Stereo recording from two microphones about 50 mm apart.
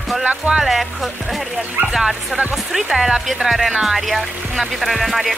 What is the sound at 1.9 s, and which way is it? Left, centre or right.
Music, centre.